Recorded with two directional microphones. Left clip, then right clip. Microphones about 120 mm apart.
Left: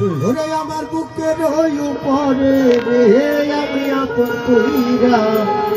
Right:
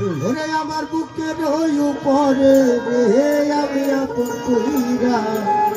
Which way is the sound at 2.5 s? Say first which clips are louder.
Left 3 dB; 60° right (ahead or behind).